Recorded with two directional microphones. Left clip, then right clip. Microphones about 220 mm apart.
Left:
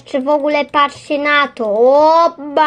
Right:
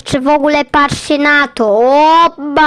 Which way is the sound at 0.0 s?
35° right (ahead or behind).